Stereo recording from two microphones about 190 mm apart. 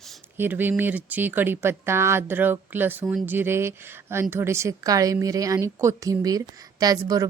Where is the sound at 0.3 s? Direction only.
10° right (ahead or behind).